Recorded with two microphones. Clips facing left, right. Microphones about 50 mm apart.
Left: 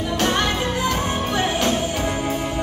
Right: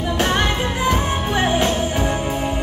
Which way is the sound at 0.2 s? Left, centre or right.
Centre.